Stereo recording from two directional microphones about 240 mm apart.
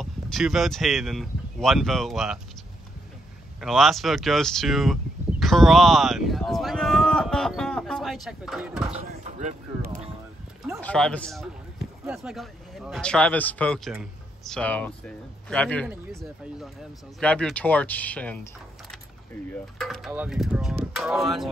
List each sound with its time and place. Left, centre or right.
0.0 s speech: centre
3.6 s speech: centre
5.4 s a sound: centre
8.9 s speech: right
10.8 s speech: centre